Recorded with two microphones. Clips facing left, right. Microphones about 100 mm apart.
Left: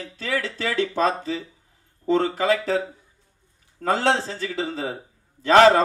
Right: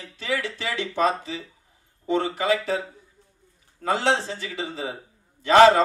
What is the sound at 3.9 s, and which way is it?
A man's voice, 20° right (ahead or behind).